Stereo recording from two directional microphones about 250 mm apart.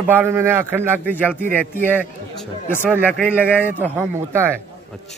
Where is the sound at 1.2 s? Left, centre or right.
Centre.